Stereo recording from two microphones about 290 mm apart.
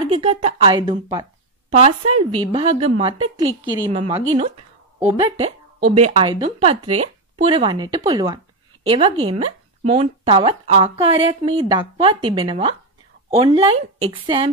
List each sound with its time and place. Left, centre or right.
0.1 s a woman's voice: right
5.0 s a woman's voice: centre